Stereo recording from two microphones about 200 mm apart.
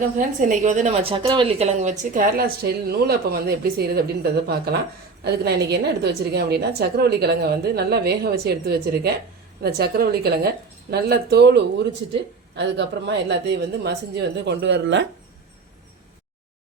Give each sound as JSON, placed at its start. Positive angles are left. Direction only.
{"t": 0.2, "sound": "a woman's voice", "side_deg": -40}